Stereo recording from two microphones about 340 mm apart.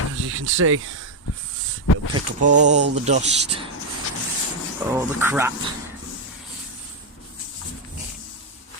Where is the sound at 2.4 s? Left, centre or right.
Right.